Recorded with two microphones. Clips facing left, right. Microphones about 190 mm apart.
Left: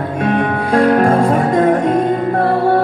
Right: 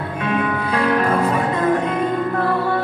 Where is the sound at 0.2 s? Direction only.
45° left (ahead or behind).